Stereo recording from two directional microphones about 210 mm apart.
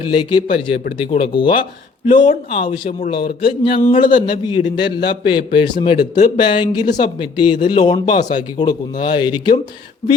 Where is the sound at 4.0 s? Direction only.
40° left (ahead or behind).